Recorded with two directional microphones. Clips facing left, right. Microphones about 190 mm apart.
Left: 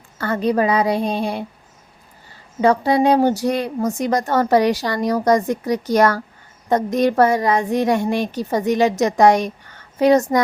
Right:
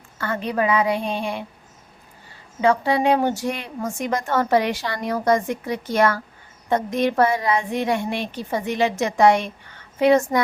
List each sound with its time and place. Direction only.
0.2 s a woman's voice: 40° left (ahead or behind)
2.6 s a woman's voice: 40° left (ahead or behind)